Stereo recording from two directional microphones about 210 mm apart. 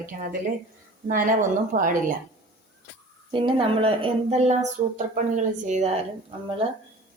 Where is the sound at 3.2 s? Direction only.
25° right (ahead or behind).